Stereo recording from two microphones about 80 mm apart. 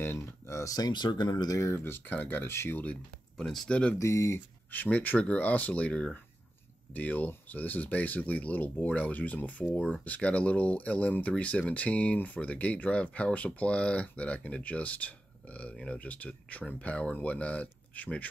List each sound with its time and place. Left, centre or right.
0.0 s speech: left
2.8 s speech: centre
4.0 s speech: left
4.6 s speech: centre